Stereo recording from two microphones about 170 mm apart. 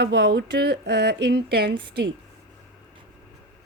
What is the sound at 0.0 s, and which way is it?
Speech, 80° right.